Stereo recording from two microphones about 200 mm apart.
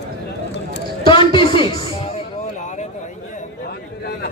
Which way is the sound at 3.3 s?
50° left (ahead or behind).